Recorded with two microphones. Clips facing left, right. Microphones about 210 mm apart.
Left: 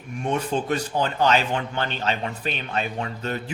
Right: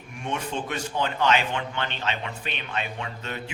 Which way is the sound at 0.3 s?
40° left (ahead or behind).